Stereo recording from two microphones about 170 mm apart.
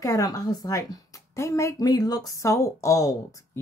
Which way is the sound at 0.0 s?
20° left (ahead or behind).